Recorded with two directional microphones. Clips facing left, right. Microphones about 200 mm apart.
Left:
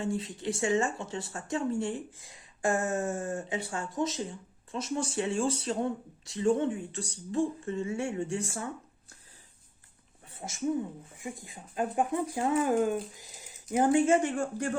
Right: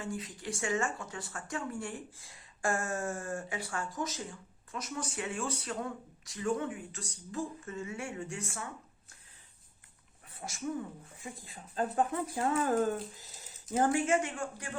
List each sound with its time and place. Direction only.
0.0 s speech: 25° left (ahead or behind)
10.2 s speech: 25° left (ahead or behind)